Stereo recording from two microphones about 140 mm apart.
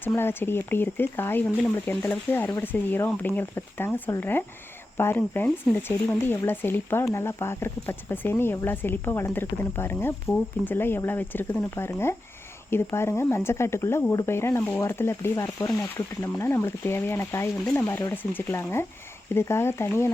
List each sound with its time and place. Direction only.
0.0 s speech: 15° left (ahead or behind)